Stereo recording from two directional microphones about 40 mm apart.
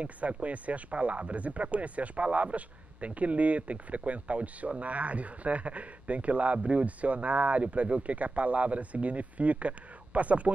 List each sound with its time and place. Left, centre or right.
0.0 s speech: right